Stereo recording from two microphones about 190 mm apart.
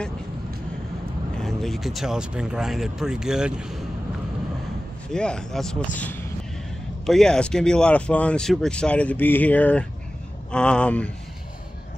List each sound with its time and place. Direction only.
1.3 s speech: centre (ahead or behind)
5.1 s speech: 5° left (ahead or behind)